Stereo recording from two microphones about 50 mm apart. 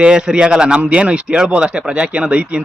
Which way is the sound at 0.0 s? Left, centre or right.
Centre.